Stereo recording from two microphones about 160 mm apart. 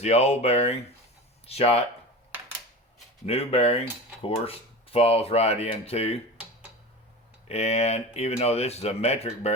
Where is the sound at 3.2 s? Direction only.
40° left (ahead or behind).